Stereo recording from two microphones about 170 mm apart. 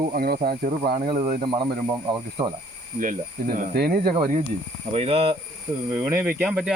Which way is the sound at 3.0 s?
50° right (ahead or behind).